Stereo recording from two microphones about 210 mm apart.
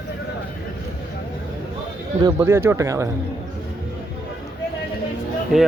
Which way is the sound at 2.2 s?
15° right (ahead or behind).